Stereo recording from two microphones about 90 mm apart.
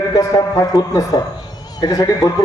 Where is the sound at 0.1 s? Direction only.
40° left (ahead or behind).